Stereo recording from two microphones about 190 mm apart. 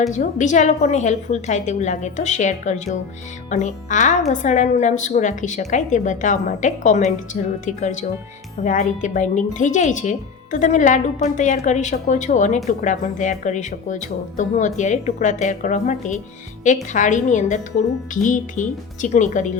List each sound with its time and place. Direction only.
0.1 s speech: 40° left (ahead or behind)